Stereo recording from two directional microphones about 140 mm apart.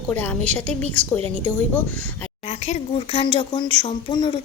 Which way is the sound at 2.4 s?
55° left (ahead or behind).